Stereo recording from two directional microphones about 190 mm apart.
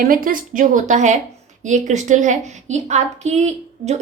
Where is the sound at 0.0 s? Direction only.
50° right (ahead or behind).